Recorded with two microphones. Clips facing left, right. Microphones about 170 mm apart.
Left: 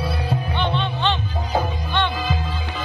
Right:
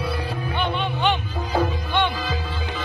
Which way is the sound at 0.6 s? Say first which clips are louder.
Right 1 dB; 10° right (ahead or behind).